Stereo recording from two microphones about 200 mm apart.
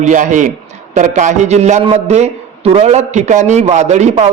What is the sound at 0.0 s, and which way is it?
A man's voice, 40° right (ahead or behind).